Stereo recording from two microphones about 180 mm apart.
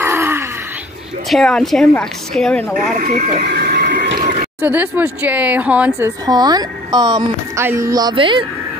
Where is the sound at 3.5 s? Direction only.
55° right (ahead or behind).